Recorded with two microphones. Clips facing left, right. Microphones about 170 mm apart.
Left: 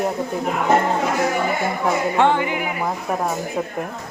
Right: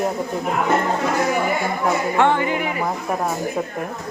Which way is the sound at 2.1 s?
15° left (ahead or behind).